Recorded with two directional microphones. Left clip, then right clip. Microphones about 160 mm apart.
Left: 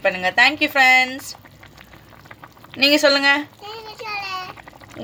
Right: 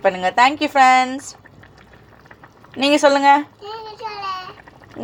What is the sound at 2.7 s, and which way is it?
Speech, 25° right (ahead or behind).